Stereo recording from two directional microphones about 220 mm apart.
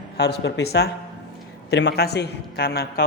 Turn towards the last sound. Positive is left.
turn(degrees=45)  # may be behind; listen again after turning